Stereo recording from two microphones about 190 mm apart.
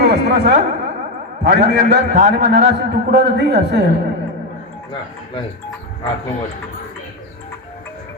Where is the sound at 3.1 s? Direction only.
60° right (ahead or behind).